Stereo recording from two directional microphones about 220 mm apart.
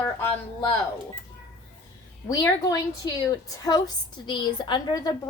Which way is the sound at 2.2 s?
15° left (ahead or behind).